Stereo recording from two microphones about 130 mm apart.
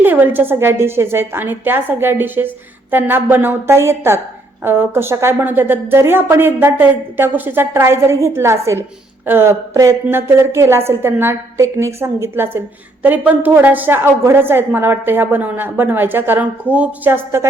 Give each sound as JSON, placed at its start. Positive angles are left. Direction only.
{"t": 0.0, "sound": "a woman's voice", "side_deg": -15}